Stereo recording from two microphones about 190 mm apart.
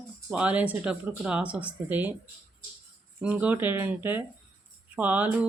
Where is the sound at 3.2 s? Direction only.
5° right (ahead or behind).